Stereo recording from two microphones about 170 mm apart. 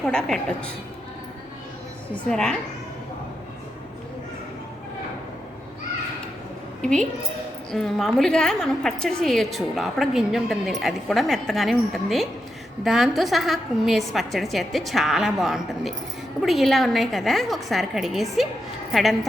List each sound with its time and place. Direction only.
0.0 s a woman's voice: 5° left (ahead or behind)
2.1 s a woman's voice: 5° left (ahead or behind)
6.8 s a woman's voice: 5° left (ahead or behind)